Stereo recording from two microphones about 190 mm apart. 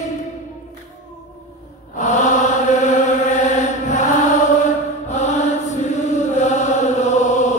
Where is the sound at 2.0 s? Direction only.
40° left (ahead or behind).